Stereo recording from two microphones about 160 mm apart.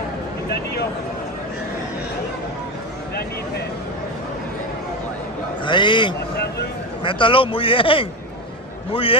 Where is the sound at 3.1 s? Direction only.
90° left.